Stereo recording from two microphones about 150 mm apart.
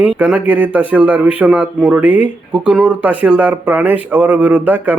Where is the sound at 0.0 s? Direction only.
10° right (ahead or behind).